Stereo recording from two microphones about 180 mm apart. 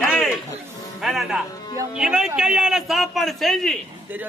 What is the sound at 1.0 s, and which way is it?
A man's voice, centre (ahead or behind).